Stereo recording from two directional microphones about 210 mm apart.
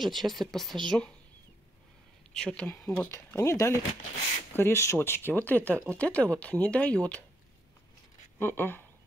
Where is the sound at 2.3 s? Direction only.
5° left (ahead or behind).